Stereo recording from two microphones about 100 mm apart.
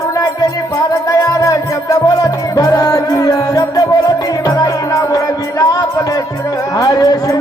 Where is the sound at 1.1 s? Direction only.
35° left (ahead or behind).